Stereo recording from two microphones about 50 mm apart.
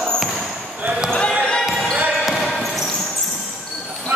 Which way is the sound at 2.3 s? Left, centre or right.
Centre.